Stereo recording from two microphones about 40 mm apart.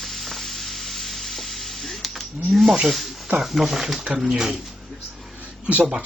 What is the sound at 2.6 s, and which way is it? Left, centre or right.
Speech, centre.